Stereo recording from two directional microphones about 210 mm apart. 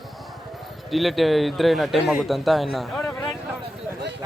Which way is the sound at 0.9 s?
Centre (ahead or behind).